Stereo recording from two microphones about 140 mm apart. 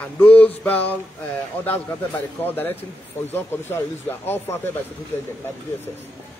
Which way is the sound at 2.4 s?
15° left (ahead or behind).